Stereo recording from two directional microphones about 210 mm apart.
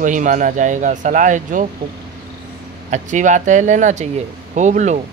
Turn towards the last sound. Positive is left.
turn(degrees=-35)  # may be behind; listen again after turning